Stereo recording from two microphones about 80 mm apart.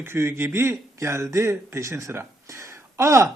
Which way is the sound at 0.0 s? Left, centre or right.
Right.